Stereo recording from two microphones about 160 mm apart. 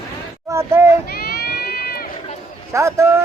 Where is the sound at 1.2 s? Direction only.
70° left (ahead or behind).